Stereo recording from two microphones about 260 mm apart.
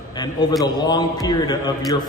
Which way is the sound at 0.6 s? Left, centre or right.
Centre.